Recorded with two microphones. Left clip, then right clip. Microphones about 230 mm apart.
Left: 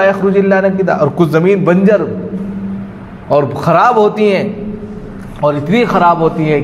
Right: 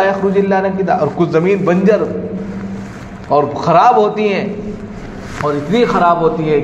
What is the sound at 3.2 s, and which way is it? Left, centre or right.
A man's voice, left.